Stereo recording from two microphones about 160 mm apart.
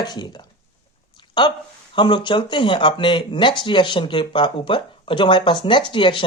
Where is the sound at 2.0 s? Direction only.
30° left (ahead or behind).